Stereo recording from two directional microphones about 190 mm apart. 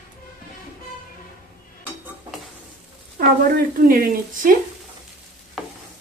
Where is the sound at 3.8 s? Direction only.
50° right (ahead or behind).